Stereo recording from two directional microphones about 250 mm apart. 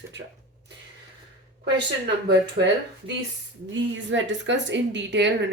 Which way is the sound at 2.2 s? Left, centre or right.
Right.